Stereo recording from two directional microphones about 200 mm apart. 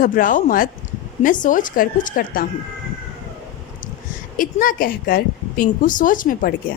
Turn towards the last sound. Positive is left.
turn(degrees=45)  # may be behind; listen again after turning